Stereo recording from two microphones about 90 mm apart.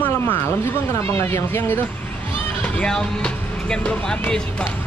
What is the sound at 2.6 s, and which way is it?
Speech, 10° left (ahead or behind).